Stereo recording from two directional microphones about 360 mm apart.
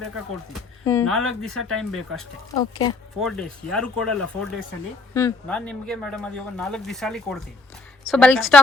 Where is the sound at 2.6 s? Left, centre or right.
Centre.